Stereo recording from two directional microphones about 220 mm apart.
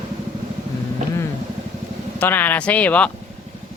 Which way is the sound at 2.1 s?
10° left (ahead or behind).